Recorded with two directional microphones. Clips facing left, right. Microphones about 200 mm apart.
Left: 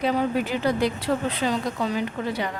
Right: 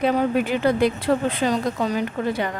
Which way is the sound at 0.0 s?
55° right (ahead or behind).